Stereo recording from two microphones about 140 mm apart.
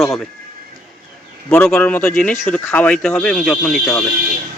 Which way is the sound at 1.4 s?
10° left (ahead or behind).